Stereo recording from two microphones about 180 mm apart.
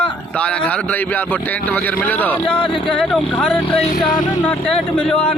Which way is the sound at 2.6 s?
30° left (ahead or behind).